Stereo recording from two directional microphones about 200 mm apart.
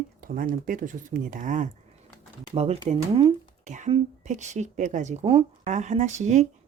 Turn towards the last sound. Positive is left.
turn(degrees=-35)  # may be behind; listen again after turning